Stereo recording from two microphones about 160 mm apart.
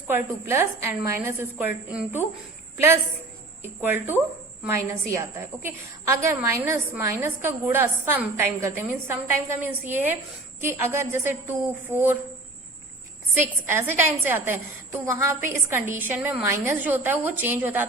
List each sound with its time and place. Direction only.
0.1 s a woman's voice: 15° right (ahead or behind)
3.6 s a woman's voice: 15° right (ahead or behind)
13.4 s a woman's voice: 15° right (ahead or behind)